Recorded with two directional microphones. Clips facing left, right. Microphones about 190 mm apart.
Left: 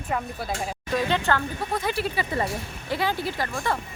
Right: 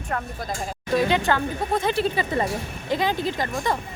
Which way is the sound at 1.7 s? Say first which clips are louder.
Right 4 dB; 25° right (ahead or behind).